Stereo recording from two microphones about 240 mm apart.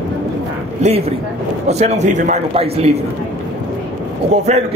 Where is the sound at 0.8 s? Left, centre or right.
Right.